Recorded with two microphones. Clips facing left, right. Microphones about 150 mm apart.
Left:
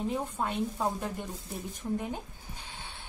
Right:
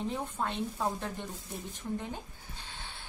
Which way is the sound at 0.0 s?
10° left (ahead or behind).